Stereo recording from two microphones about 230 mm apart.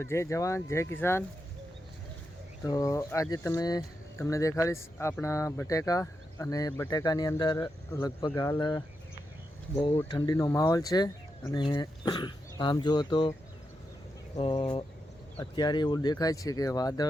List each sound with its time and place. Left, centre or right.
0.0 s speech: centre
2.6 s speech: centre
14.3 s speech: left